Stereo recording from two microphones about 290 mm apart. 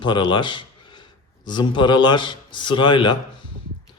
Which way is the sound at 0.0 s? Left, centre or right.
Centre.